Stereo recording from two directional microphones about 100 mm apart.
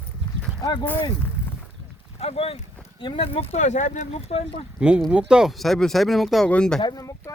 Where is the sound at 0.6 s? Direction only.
40° left (ahead or behind).